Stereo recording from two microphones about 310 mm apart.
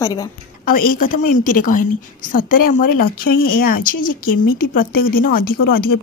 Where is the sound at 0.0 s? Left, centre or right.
Centre.